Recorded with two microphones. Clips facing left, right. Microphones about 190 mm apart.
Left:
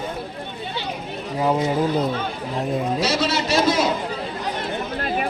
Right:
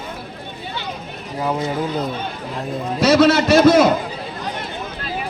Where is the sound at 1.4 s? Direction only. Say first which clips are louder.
Left 2 dB; 10° left (ahead or behind).